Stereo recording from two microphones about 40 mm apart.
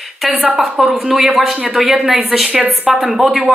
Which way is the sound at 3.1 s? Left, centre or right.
Centre.